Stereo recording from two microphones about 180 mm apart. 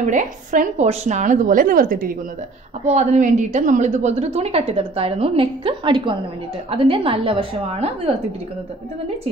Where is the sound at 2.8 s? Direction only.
40° right (ahead or behind).